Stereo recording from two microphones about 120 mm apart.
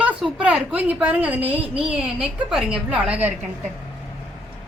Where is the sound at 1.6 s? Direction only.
50° right (ahead or behind).